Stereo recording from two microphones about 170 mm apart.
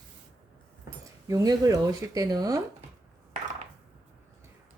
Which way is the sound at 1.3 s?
20° right (ahead or behind).